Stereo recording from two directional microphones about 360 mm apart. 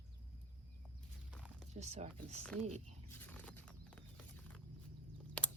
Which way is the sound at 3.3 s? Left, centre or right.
Centre.